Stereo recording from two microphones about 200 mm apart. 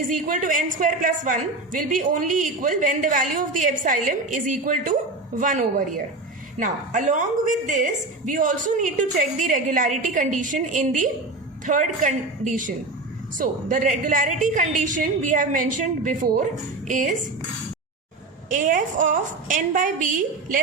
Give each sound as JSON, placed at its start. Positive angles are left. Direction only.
{"t": 0.1, "sound": "a woman's voice", "side_deg": -40}
{"t": 18.5, "sound": "a woman's voice", "side_deg": -40}